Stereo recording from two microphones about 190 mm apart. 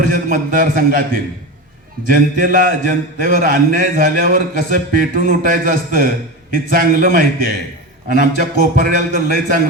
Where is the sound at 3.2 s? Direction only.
45° right (ahead or behind).